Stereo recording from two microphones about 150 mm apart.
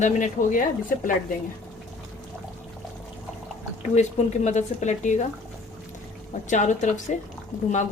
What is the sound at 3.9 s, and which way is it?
A woman's voice, 50° left (ahead or behind).